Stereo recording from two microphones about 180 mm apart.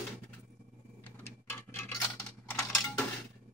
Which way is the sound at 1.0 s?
15° left (ahead or behind).